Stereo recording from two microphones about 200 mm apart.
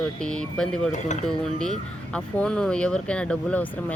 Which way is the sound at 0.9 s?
35° left (ahead or behind).